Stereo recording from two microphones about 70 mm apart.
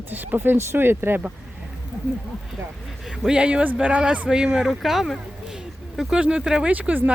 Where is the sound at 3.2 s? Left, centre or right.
Centre.